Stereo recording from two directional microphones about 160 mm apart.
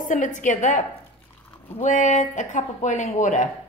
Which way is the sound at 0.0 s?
55° left (ahead or behind).